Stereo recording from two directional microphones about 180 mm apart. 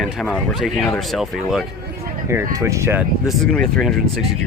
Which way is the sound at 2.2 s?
15° right (ahead or behind).